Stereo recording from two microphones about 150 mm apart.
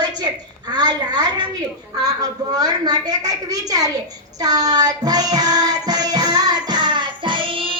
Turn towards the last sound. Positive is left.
turn(degrees=-35)  # may be behind; listen again after turning